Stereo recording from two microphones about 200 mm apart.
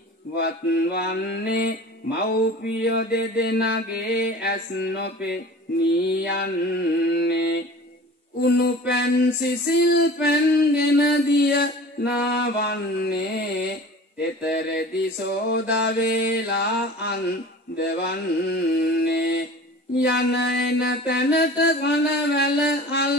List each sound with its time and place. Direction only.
0.4 s mantra: 55° left (ahead or behind)
10.8 s mantra: 50° left (ahead or behind)